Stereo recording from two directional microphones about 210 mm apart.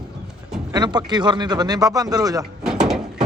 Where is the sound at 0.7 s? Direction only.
20° right (ahead or behind).